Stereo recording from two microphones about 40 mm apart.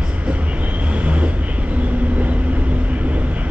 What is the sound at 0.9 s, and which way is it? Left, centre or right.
Vehicle, right.